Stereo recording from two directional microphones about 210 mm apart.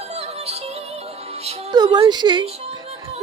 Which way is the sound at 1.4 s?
20° right (ahead or behind).